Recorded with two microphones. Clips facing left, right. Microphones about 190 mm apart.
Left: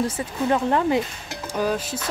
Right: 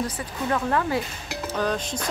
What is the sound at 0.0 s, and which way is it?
Speech, 25° left (ahead or behind).